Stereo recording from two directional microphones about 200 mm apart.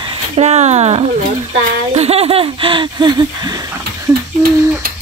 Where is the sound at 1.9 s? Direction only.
30° right (ahead or behind).